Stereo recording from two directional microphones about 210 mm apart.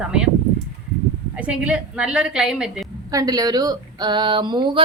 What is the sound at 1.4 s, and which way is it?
Speech, 5° right (ahead or behind).